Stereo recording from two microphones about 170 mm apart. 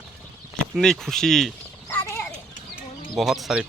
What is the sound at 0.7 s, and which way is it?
Speech, centre (ahead or behind).